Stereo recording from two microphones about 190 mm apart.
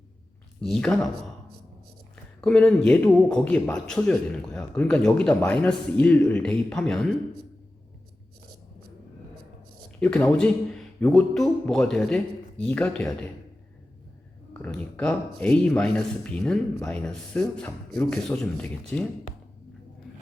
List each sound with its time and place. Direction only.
0.6 s speech: 5° left (ahead or behind)
2.4 s speech: 5° left (ahead or behind)
10.0 s speech: 5° left (ahead or behind)
14.6 s speech: 10° left (ahead or behind)